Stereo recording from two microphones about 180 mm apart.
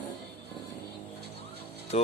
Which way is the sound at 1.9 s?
35° left (ahead or behind).